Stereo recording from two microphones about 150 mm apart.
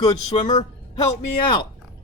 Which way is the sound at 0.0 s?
25° left (ahead or behind).